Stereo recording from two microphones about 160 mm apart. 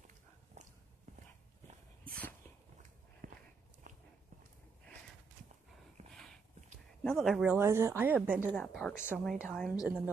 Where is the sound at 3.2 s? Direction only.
55° right (ahead or behind).